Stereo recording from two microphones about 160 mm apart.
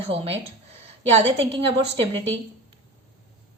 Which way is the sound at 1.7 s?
35° right (ahead or behind).